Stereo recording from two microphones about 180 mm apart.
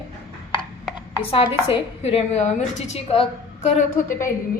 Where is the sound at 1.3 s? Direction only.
30° left (ahead or behind).